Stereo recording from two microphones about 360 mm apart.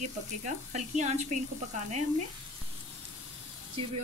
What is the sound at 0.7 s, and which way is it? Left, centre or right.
Speech, centre.